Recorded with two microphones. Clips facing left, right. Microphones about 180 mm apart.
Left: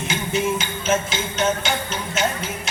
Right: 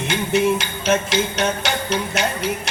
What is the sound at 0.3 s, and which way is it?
Music, 70° right (ahead or behind).